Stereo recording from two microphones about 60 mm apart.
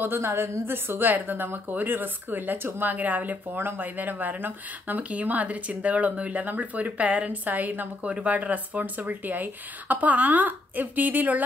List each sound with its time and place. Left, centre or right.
0.0 s a woman's voice: right
8.0 s speech: centre